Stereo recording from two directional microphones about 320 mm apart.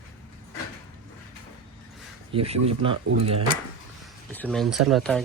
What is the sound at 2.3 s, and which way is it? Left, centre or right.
Speech, centre.